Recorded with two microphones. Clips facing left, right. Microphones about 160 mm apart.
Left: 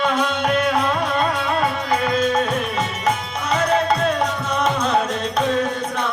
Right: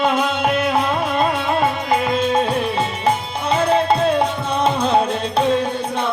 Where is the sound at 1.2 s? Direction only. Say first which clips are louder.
Right 2 dB; 25° right (ahead or behind).